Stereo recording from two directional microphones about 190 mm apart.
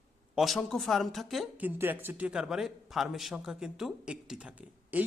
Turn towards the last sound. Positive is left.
turn(degrees=-10)  # may be behind; listen again after turning